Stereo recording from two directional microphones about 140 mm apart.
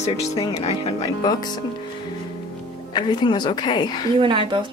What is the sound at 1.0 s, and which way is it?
Speech, 30° left (ahead or behind).